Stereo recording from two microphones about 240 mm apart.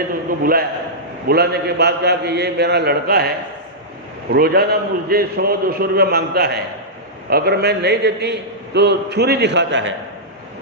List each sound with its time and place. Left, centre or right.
0.1 s a man's voice: right